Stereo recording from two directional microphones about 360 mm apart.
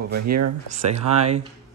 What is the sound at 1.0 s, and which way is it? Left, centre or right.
Speech, centre.